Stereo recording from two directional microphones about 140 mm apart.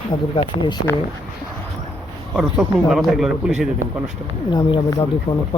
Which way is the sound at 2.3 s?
5° right (ahead or behind).